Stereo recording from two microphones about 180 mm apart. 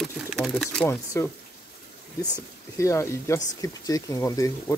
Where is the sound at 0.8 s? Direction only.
15° left (ahead or behind).